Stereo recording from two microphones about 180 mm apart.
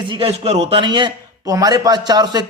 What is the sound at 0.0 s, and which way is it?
A man's voice, 30° right (ahead or behind).